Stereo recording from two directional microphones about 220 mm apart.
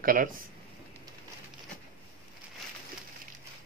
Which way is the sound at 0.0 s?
40° right (ahead or behind).